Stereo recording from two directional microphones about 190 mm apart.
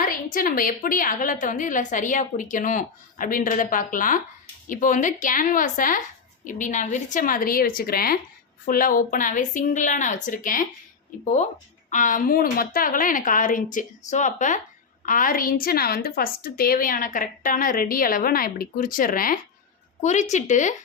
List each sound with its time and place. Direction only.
0.0 s a woman's voice: 45° left (ahead or behind)
11.9 s a woman's voice: 45° left (ahead or behind)